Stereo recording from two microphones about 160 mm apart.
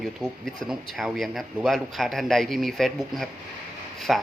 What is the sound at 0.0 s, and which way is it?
Speech, centre (ahead or behind).